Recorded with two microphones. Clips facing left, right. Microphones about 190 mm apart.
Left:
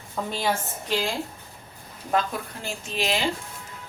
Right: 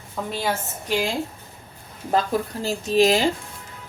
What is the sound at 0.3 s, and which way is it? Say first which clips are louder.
Speech: right 1 dB; centre (ahead or behind).